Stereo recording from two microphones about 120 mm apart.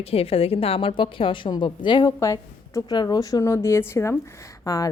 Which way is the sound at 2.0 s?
25° left (ahead or behind).